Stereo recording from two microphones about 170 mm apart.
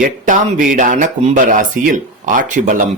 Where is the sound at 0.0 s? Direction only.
50° right (ahead or behind).